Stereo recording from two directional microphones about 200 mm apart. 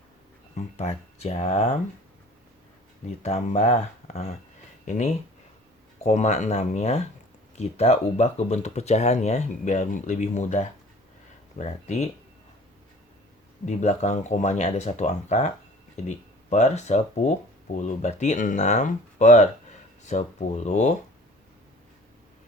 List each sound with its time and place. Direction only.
0.5 s speech: 35° left (ahead or behind)
3.2 s speech: 35° left (ahead or behind)
13.7 s speech: 35° left (ahead or behind)